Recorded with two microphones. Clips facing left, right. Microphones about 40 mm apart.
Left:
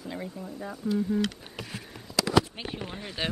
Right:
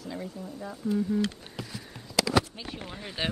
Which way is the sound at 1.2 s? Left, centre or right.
Left.